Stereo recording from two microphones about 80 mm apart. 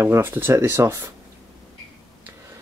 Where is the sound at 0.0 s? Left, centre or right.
Right.